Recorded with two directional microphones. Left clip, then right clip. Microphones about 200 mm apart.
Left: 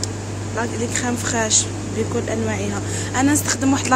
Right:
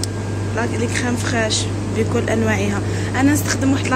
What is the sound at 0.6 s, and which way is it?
Speech, 20° left (ahead or behind).